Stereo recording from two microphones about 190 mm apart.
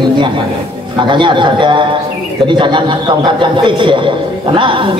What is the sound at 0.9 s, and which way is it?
A man's voice, 25° right (ahead or behind).